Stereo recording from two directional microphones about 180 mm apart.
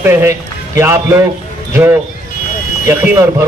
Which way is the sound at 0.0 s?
15° right (ahead or behind).